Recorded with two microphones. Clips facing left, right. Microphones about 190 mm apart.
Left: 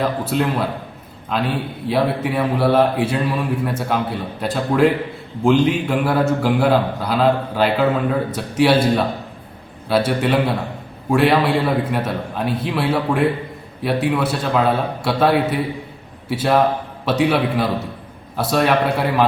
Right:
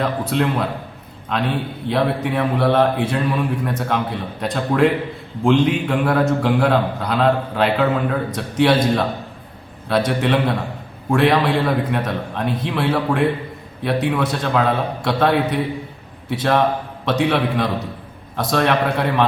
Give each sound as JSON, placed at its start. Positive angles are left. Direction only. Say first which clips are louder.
{"t": 0.0, "sound": "a man's voice", "louder": "even", "side_deg": 5}